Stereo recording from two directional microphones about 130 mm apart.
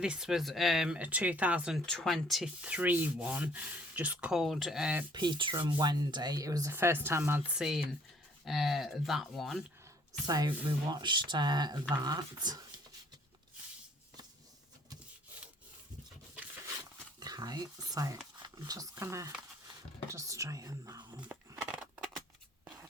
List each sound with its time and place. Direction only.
0.0 s speech: 5° right (ahead or behind)
1.9 s sanding: 5° left (ahead or behind)
5.1 s speech: 35° right (ahead or behind); by 7.4 s 20° right (ahead or behind)
7.5 s speech: centre (ahead or behind)
10.2 s speech: 30° right (ahead or behind)
17.2 s a sound: 30° right (ahead or behind)
18.4 s speech: 30° right (ahead or behind)
19.6 s whispering: 25° right (ahead or behind)
21.7 s a sound: 5° right (ahead or behind)